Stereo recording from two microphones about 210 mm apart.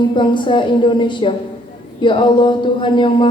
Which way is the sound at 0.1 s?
20° left (ahead or behind).